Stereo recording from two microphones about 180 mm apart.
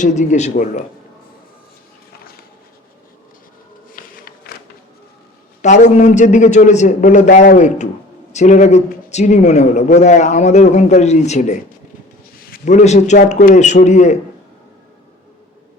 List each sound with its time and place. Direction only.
0.0 s a man's voice: 45° left (ahead or behind)
3.9 s a sound: 55° left (ahead or behind)
5.6 s a man's voice: 40° left (ahead or behind)